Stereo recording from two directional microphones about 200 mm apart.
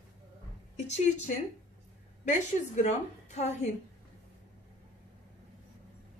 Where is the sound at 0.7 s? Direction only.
35° left (ahead or behind).